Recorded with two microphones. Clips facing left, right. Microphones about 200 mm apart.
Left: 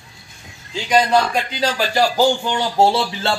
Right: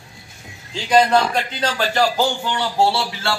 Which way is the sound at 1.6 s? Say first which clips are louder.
Left 2 dB; 10° left (ahead or behind).